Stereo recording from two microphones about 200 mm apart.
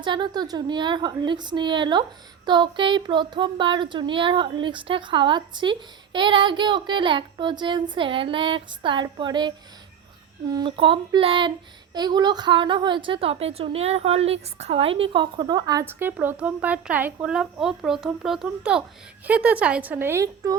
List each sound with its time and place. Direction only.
0.0 s a woman's voice: 25° right (ahead or behind)
10.5 s a woman's voice: 25° right (ahead or behind)